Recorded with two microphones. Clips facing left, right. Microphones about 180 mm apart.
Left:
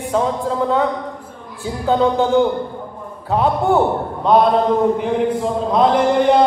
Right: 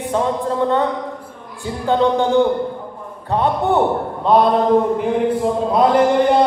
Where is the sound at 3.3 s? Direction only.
Centre (ahead or behind).